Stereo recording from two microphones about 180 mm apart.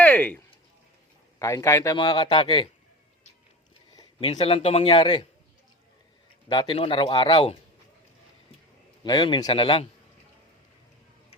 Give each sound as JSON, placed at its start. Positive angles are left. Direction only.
{"t": 0.0, "sound": "a sound", "side_deg": 10}
{"t": 1.4, "sound": "a man's voice", "side_deg": 15}
{"t": 3.9, "sound": "speech", "side_deg": 20}
{"t": 6.5, "sound": "a man's voice", "side_deg": 25}
{"t": 9.0, "sound": "a man's voice", "side_deg": 25}